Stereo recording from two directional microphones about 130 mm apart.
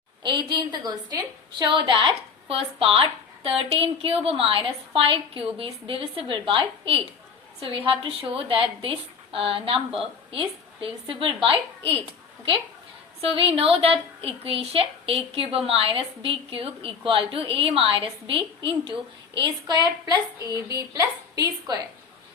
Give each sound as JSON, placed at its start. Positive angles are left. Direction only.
{"t": 0.2, "sound": "a woman's voice", "side_deg": -35}
{"t": 11.1, "sound": "a woman's voice", "side_deg": -45}
{"t": 13.3, "sound": "a woman's voice", "side_deg": -45}